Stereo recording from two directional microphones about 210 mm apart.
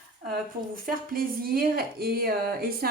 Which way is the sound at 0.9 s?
45° right (ahead or behind).